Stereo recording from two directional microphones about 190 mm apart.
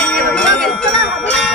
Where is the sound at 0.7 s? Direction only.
5° left (ahead or behind).